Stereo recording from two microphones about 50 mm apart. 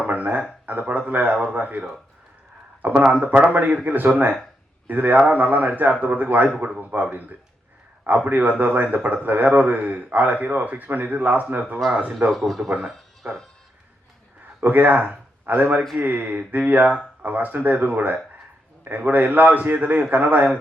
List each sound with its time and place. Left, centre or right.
0.0 s a sound: right
2.8 s a man's voice: right
12.3 s speech: centre
13.2 s a man's voice: right
14.6 s a man's voice: right